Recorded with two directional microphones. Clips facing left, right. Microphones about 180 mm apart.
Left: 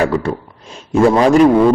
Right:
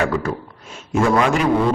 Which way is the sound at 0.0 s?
30° left (ahead or behind).